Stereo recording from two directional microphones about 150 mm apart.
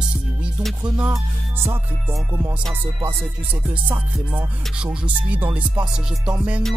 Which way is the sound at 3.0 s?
10° right (ahead or behind).